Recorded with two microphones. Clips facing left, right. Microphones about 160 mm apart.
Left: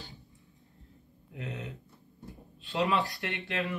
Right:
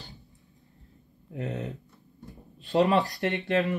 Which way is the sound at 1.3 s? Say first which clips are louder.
Right 7 dB; 40° right (ahead or behind).